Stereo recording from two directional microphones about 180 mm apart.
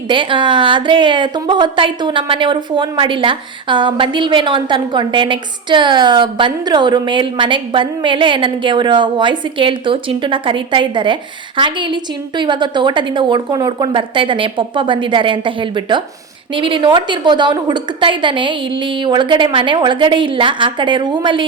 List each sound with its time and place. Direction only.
0.1 s a woman's voice: 30° right (ahead or behind)